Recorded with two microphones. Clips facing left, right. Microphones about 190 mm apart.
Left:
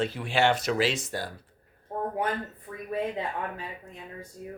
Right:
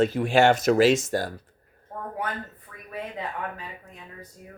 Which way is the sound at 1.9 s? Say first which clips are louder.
Left 5 dB; 25° left (ahead or behind).